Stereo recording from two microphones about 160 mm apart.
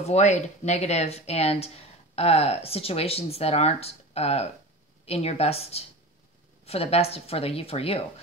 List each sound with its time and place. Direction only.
0.0 s speech: 45° left (ahead or behind)